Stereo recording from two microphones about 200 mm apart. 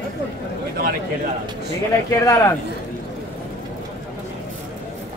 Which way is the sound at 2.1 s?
15° left (ahead or behind).